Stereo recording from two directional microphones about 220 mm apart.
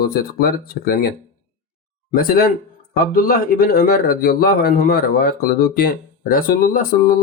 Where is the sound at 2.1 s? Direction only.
40° left (ahead or behind).